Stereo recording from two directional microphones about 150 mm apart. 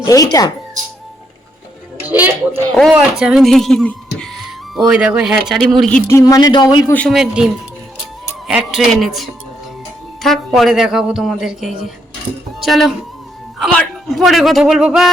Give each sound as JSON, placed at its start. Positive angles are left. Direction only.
{"t": 0.0, "sound": "speech", "side_deg": 25}
{"t": 2.0, "sound": "music", "side_deg": -10}
{"t": 2.9, "sound": "speech", "side_deg": -5}
{"t": 6.1, "sound": "speech", "side_deg": 20}
{"t": 7.1, "sound": "speech", "side_deg": -5}